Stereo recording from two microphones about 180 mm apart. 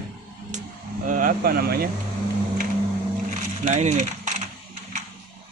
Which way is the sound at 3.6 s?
40° right (ahead or behind).